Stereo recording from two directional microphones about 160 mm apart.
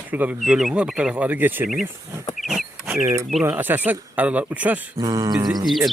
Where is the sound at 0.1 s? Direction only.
10° right (ahead or behind).